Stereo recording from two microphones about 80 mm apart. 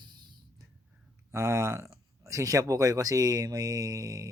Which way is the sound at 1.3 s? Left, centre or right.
Right.